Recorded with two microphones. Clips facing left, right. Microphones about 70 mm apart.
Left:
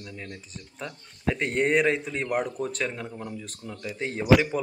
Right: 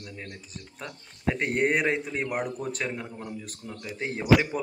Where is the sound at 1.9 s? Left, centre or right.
Centre.